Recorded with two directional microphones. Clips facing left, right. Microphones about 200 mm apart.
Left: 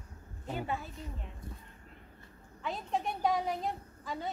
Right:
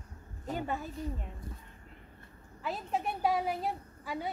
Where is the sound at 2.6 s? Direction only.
5° right (ahead or behind).